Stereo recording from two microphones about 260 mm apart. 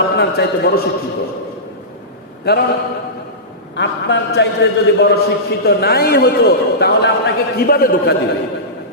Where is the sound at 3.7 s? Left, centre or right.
Left.